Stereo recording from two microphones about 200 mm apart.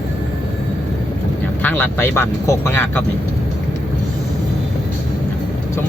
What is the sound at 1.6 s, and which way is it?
Speech, 10° left (ahead or behind).